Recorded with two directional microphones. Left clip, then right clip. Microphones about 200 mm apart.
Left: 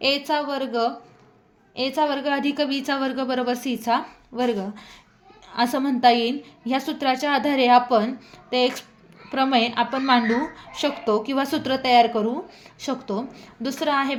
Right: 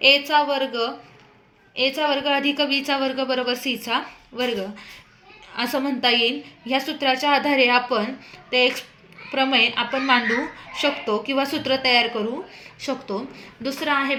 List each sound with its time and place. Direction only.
0.0 s a woman's voice: 55° left (ahead or behind)